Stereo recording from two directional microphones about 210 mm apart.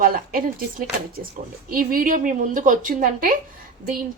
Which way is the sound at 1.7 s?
40° right (ahead or behind).